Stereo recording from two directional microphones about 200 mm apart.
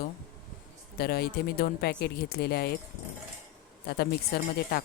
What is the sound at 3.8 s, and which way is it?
Speech, 50° left (ahead or behind).